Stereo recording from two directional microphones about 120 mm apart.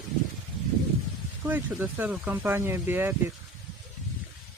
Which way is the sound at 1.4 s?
15° right (ahead or behind).